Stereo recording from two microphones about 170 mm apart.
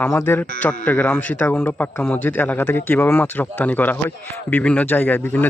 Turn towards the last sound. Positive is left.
turn(degrees=10)  # may be behind; listen again after turning